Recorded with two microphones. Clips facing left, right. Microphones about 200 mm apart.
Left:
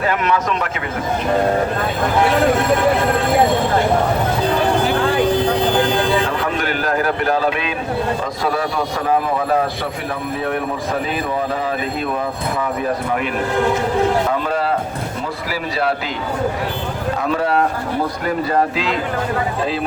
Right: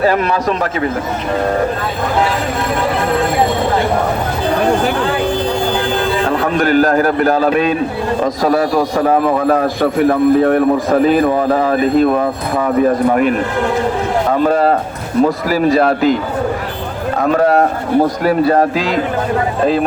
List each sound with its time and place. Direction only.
0.0 s a man's voice: 35° right (ahead or behind)
6.2 s a man's voice: 40° right (ahead or behind)
14.3 s a man's voice: 45° right (ahead or behind)
17.2 s a man's voice: 50° right (ahead or behind)